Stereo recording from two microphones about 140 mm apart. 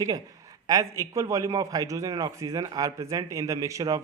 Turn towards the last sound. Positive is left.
turn(degrees=-25)  # may be behind; listen again after turning